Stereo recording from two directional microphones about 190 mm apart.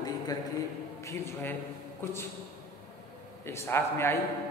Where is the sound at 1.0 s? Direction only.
15° left (ahead or behind).